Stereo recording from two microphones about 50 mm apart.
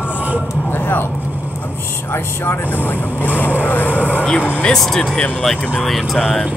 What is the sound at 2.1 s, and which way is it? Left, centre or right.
Speech, left.